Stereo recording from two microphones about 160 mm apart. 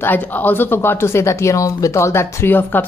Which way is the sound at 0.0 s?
10° left (ahead or behind).